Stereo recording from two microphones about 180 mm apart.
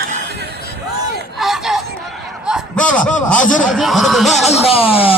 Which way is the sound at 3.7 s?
Centre (ahead or behind).